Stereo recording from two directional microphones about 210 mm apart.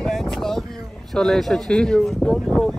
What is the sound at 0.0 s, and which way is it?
Vehicle, centre (ahead or behind).